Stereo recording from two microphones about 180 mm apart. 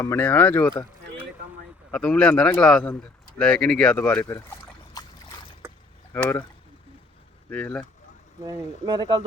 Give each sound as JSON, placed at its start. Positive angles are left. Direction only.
{"t": 0.0, "sound": "speech", "side_deg": 15}
{"t": 1.9, "sound": "speech", "side_deg": 5}
{"t": 7.5, "sound": "speech", "side_deg": 5}
{"t": 8.4, "sound": "speech", "side_deg": -25}